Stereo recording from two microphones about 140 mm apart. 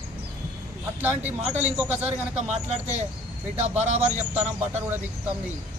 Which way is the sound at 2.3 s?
55° right (ahead or behind).